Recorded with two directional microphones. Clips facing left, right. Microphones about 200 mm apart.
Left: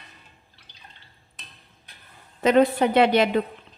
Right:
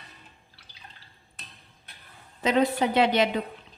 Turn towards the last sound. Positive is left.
turn(degrees=55)  # may be behind; listen again after turning